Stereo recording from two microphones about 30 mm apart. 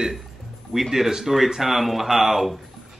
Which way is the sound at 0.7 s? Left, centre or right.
Centre.